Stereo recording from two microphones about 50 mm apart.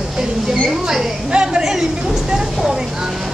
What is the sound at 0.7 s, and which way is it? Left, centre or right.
A woman's voice, centre.